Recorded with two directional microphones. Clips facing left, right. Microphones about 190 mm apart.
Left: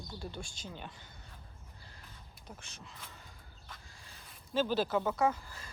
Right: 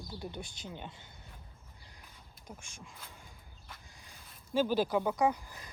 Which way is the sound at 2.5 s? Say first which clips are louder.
Right 1 dB; 10° right (ahead or behind).